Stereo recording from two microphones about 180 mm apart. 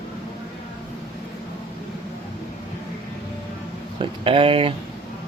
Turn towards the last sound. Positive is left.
turn(degrees=-30)  # may be behind; listen again after turning